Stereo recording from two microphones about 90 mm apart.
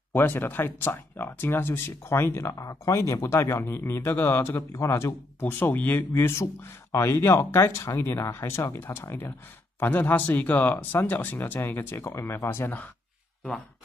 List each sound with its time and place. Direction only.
0.1 s speech: 20° left (ahead or behind)
12.1 s speech: 35° left (ahead or behind); by 12.9 s 20° left (ahead or behind)